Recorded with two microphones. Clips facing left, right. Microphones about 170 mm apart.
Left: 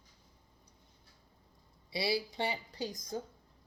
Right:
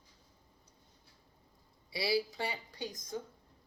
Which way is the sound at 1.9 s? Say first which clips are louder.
Right 1 dB; 25° left (ahead or behind).